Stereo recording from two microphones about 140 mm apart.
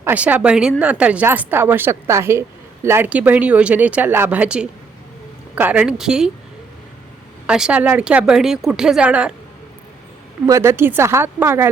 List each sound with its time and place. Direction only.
0.0 s a woman's voice: 10° right (ahead or behind)
7.4 s speech: 5° right (ahead or behind)
10.4 s speech: 20° right (ahead or behind)